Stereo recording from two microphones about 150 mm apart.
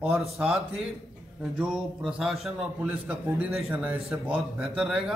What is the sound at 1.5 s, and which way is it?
Speech, 5° right (ahead or behind).